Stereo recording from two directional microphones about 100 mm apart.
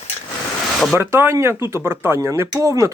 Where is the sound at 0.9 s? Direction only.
25° right (ahead or behind).